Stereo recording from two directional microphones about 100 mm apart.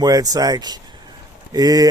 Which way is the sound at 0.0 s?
40° right (ahead or behind).